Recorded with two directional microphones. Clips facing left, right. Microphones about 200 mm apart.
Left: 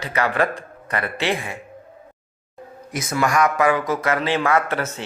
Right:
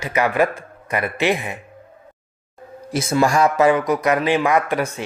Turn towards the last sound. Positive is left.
turn(degrees=-15)  # may be behind; listen again after turning